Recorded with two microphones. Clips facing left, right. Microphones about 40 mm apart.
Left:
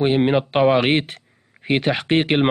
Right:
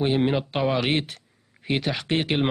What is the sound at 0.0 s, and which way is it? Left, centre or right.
Speech, left.